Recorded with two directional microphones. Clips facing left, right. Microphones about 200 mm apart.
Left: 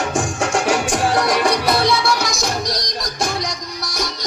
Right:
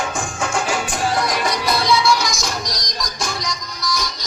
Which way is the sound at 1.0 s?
65° left (ahead or behind).